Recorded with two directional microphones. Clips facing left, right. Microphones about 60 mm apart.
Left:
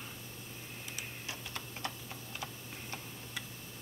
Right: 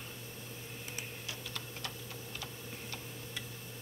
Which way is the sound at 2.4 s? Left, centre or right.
Left.